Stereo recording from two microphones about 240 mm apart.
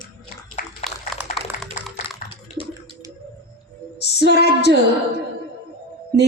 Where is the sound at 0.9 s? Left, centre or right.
Centre.